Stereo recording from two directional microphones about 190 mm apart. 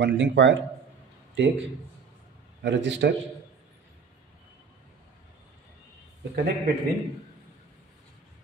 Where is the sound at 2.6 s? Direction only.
70° right (ahead or behind).